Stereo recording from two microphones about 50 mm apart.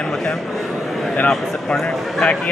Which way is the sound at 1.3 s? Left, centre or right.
Centre.